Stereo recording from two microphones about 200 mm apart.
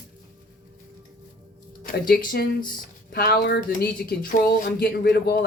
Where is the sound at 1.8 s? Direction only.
45° left (ahead or behind).